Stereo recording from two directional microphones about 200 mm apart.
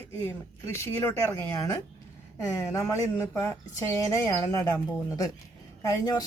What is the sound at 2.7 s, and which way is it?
A woman's voice, 15° left (ahead or behind).